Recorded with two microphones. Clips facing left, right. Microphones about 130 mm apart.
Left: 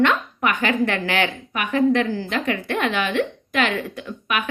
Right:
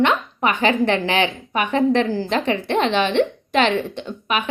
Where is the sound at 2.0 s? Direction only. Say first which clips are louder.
Right 3 dB; 40° right (ahead or behind).